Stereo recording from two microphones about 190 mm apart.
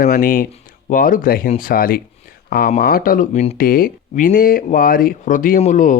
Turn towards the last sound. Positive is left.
turn(degrees=40)  # may be behind; listen again after turning